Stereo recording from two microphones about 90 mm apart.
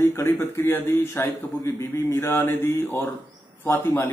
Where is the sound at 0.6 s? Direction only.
25° left (ahead or behind).